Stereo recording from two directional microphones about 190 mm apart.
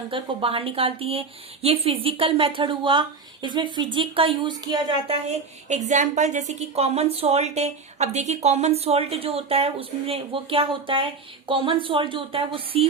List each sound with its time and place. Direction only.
0.1 s speech: 30° right (ahead or behind)
5.6 s a woman's voice: 35° right (ahead or behind)